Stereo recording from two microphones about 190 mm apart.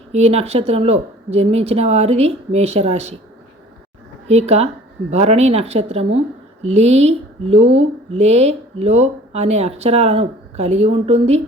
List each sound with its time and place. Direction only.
0.1 s speech: 35° right (ahead or behind)
4.3 s speech: 35° right (ahead or behind)